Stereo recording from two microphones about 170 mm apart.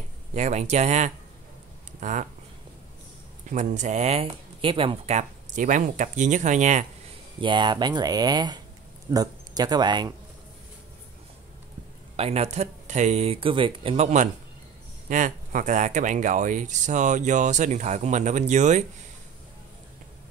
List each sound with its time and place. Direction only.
0.3 s speech: 45° right (ahead or behind)
3.4 s speech: 45° right (ahead or behind)
7.3 s speech: 30° right (ahead or behind)
12.2 s speech: 35° right (ahead or behind)